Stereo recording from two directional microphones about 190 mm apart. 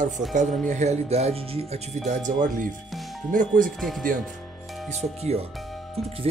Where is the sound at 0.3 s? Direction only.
40° right (ahead or behind).